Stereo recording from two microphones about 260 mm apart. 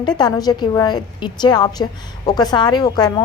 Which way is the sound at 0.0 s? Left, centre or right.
Centre.